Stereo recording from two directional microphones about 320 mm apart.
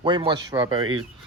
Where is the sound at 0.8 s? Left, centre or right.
Right.